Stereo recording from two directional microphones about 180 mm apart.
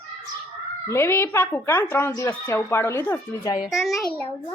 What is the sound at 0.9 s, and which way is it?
A woman's voice, 15° left (ahead or behind).